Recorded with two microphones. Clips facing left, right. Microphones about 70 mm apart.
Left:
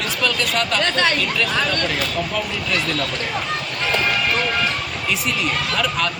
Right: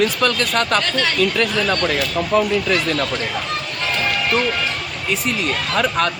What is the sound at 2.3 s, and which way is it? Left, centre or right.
Speech, right.